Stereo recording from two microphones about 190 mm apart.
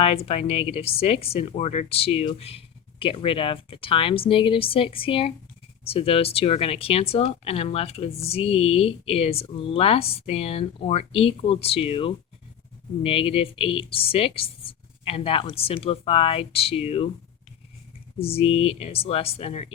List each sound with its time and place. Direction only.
0.0 s speech: 30° left (ahead or behind)
18.2 s speech: 30° left (ahead or behind)